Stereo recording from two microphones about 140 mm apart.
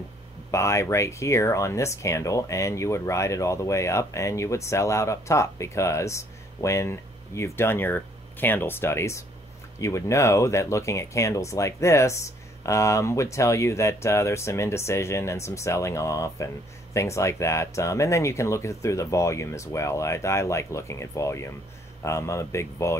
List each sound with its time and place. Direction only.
0.5 s speech: 20° left (ahead or behind)